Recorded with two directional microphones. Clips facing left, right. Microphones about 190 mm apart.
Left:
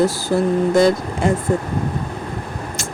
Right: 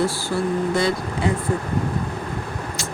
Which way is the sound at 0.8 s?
45° left (ahead or behind).